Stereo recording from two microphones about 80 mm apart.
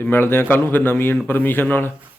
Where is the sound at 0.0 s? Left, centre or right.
Left.